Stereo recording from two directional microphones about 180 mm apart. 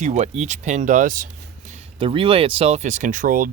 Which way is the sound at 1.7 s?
35° right (ahead or behind).